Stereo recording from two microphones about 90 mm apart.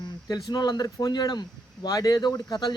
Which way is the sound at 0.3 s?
50° left (ahead or behind).